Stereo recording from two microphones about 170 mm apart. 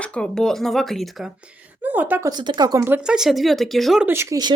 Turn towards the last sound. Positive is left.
turn(degrees=-20)  # may be behind; listen again after turning